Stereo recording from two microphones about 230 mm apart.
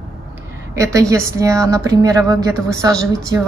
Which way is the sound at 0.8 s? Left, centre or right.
Centre.